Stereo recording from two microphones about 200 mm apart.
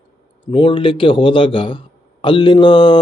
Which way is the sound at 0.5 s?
25° left (ahead or behind).